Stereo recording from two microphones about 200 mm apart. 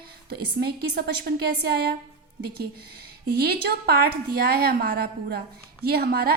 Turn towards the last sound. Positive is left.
turn(degrees=-50)  # may be behind; listen again after turning